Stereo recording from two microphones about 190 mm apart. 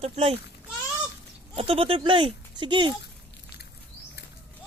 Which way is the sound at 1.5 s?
30° right (ahead or behind).